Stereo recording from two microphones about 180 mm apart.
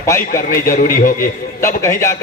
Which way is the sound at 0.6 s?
50° left (ahead or behind).